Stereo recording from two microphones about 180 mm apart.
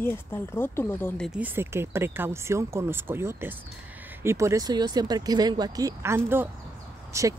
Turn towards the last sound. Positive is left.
turn(degrees=-15)  # may be behind; listen again after turning